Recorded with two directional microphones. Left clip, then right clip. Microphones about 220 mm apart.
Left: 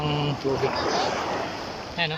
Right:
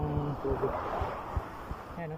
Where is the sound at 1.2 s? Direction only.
40° left (ahead or behind).